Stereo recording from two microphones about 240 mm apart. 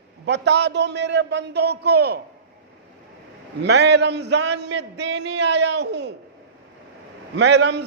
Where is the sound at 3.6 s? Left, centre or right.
Right.